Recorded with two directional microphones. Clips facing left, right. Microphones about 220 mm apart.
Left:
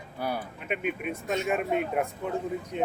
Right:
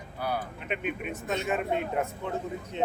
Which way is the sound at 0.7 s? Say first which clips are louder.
Left 2 dB; 10° left (ahead or behind).